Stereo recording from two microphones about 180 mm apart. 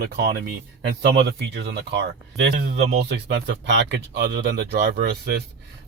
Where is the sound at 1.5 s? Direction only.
70° right (ahead or behind).